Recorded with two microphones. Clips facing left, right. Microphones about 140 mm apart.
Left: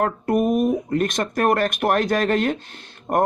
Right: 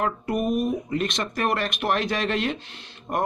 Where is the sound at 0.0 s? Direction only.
50° left (ahead or behind).